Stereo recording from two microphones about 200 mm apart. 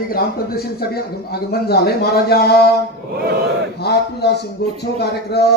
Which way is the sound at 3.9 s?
55° left (ahead or behind).